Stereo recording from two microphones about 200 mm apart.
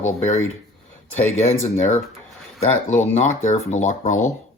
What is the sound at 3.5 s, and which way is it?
Speech, 35° left (ahead or behind).